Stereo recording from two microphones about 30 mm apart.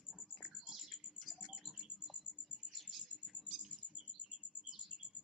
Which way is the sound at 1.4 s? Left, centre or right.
Centre.